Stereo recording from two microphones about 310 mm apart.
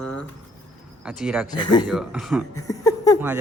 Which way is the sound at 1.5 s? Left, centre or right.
Centre.